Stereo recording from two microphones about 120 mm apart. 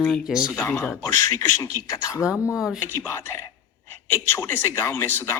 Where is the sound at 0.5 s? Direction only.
20° left (ahead or behind).